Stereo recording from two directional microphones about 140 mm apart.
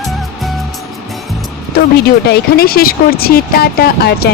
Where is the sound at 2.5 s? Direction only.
90° left.